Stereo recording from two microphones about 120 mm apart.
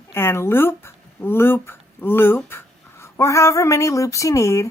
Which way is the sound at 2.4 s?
20° left (ahead or behind).